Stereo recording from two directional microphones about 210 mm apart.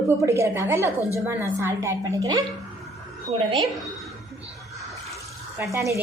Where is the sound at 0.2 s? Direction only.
15° right (ahead or behind).